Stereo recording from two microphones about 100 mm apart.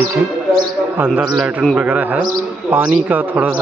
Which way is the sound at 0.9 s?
20° right (ahead or behind).